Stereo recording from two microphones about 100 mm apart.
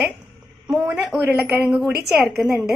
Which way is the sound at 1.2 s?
20° right (ahead or behind).